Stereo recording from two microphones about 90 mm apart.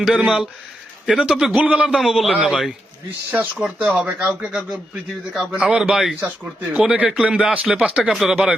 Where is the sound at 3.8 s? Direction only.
10° right (ahead or behind).